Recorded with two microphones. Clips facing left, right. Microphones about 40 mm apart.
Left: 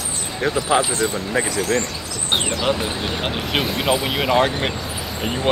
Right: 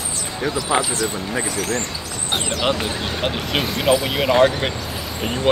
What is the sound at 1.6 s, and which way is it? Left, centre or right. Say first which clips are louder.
Speech: left 4 dB; left.